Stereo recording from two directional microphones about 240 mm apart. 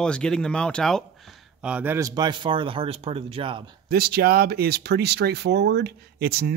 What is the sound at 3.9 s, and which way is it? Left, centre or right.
Speech, right.